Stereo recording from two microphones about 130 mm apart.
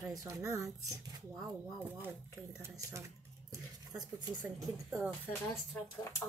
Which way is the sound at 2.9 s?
25° right (ahead or behind).